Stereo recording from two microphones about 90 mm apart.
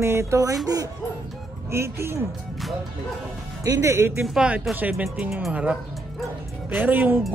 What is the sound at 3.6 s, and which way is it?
Speech, 30° right (ahead or behind).